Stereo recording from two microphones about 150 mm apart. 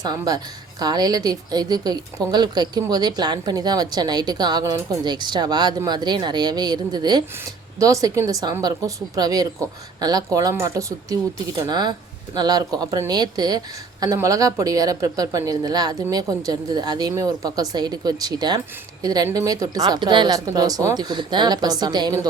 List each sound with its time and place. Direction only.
0.0 s speech: 25° right (ahead or behind)